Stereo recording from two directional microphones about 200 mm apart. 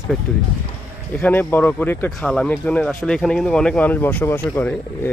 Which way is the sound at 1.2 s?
10° left (ahead or behind).